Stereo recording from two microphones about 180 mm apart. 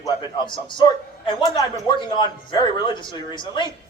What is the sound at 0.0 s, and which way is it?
A man's voice, 25° left (ahead or behind).